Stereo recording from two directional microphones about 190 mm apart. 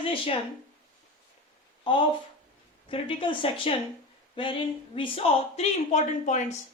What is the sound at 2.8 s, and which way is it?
A man's voice, 25° left (ahead or behind).